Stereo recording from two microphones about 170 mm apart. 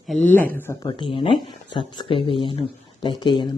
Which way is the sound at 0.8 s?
25° left (ahead or behind).